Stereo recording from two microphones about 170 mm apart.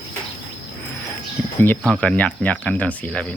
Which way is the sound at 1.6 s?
5° left (ahead or behind).